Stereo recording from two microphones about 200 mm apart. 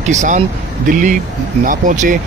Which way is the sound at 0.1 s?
35° right (ahead or behind).